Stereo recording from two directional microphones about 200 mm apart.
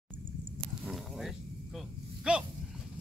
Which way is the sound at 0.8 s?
Centre (ahead or behind).